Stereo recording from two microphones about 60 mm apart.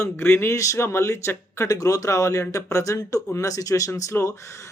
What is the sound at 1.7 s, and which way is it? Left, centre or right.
Speech, left.